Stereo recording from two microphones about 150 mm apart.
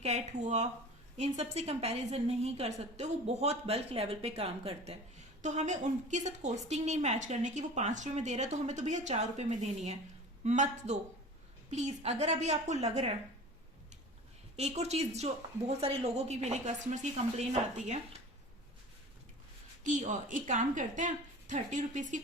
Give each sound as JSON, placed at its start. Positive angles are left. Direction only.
{"t": 0.0, "sound": "a woman's voice", "side_deg": -45}
{"t": 14.5, "sound": "a woman's voice", "side_deg": -45}
{"t": 19.8, "sound": "a woman's voice", "side_deg": -55}